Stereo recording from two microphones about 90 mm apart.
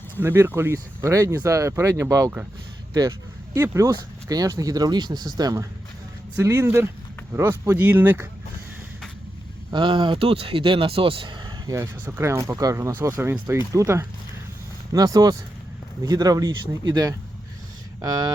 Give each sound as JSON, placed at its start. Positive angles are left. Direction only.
{"t": 0.2, "sound": "speech", "side_deg": -25}
{"t": 2.9, "sound": "a sound", "side_deg": -35}
{"t": 3.6, "sound": "speech", "side_deg": -35}
{"t": 6.3, "sound": "speech", "side_deg": -30}
{"t": 9.7, "sound": "speech", "side_deg": -65}
{"t": 11.7, "sound": "speech", "side_deg": -30}
{"t": 14.9, "sound": "speech", "side_deg": -45}